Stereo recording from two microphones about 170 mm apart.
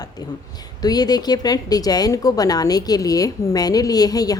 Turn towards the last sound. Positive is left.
turn(degrees=20)  # may be behind; listen again after turning